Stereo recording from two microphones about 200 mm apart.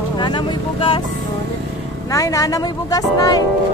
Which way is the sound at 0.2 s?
25° left (ahead or behind).